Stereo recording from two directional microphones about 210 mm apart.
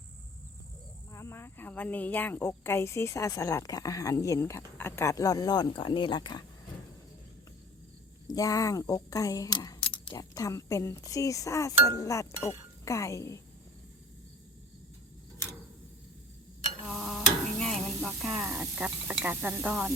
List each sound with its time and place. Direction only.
1.1 s speech: 10° left (ahead or behind)
8.3 s a woman's voice: 15° left (ahead or behind)
16.8 s stir: centre (ahead or behind)